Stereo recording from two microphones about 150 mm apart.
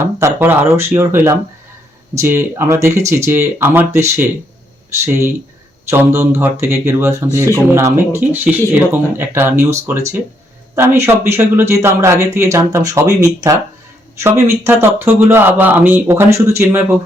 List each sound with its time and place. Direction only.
0.0 s speech: 15° right (ahead or behind)